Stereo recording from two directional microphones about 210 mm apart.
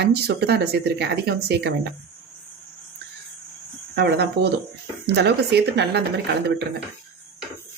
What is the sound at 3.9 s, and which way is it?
Speech, 50° right (ahead or behind).